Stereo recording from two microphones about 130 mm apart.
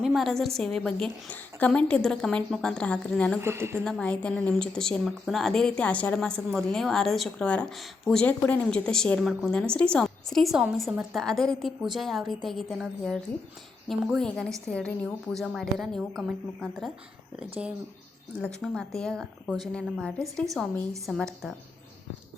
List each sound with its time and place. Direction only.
0.0 s a woman's voice: centre (ahead or behind)
3.4 s speech: 20° right (ahead or behind)
3.8 s a woman's voice: 5° left (ahead or behind)
18.4 s a woman's voice: 5° left (ahead or behind)